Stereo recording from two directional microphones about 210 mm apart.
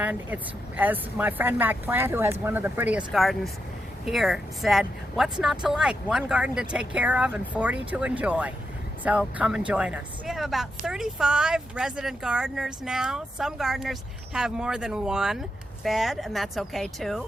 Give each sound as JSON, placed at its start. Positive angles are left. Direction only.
{"t": 0.0, "sound": "speech", "side_deg": -10}